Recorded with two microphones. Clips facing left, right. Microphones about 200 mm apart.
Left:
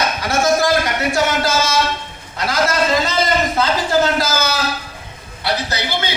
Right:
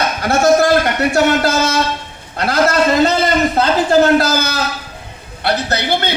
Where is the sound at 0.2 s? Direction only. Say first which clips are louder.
Right 6 dB; 60° right (ahead or behind).